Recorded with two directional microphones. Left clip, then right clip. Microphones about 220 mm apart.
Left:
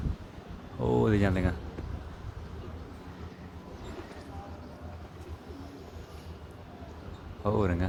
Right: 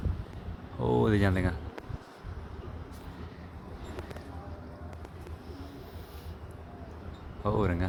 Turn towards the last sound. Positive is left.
turn(degrees=0)  # may be behind; listen again after turning